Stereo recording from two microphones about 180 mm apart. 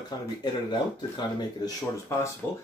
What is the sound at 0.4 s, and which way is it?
Speech, 25° left (ahead or behind).